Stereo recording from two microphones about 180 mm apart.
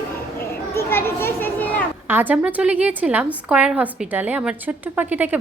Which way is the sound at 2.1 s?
10° right (ahead or behind).